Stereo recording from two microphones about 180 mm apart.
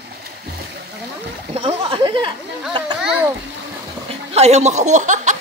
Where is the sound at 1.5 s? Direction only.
35° right (ahead or behind).